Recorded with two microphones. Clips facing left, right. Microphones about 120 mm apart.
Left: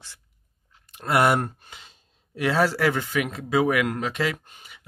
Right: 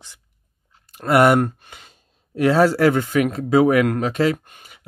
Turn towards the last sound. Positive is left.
turn(degrees=-55)  # may be behind; listen again after turning